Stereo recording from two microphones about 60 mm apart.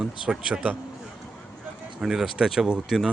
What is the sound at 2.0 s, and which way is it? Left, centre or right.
Speech, centre.